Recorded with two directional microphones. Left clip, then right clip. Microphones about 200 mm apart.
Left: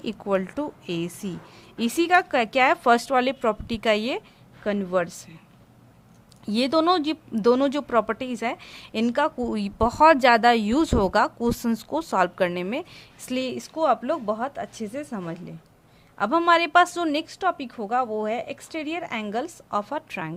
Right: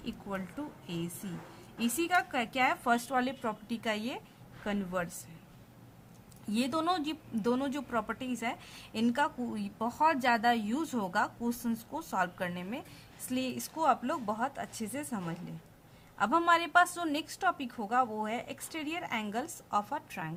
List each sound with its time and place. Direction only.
0.0 s speech: 45° left (ahead or behind)
6.4 s a woman's voice: 35° left (ahead or behind)